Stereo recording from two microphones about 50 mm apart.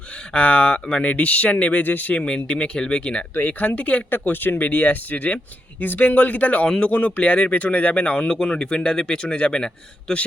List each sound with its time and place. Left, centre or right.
0.3 s speech: left
1.8 s speech: left
2.2 s speech: left
3.3 s speech: left
4.1 s speech: left
6.7 s a man's voice: centre
7.2 s a man's voice: left